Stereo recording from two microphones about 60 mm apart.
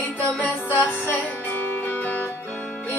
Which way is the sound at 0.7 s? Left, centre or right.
Left.